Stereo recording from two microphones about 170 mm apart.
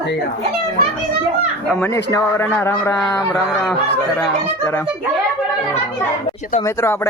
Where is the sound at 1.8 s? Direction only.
15° left (ahead or behind).